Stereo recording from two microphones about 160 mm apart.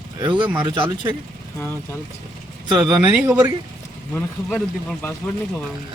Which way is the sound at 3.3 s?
20° right (ahead or behind).